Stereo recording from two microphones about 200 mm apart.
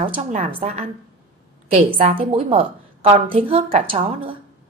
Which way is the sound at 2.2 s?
25° right (ahead or behind).